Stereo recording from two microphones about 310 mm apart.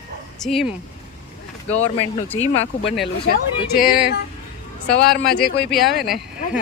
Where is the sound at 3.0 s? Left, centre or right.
Left.